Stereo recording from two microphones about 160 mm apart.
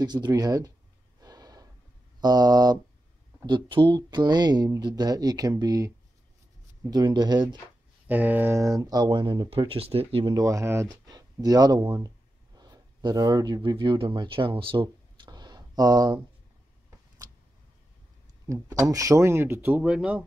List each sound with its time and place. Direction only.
0.0 s speech: 25° right (ahead or behind)
1.2 s gasp: 25° right (ahead or behind)
2.1 s speech: 25° right (ahead or behind)
8.1 s speech: 10° right (ahead or behind); by 10.3 s 35° right (ahead or behind)
10.3 s speech: 20° right (ahead or behind)
18.5 s speech: 20° right (ahead or behind)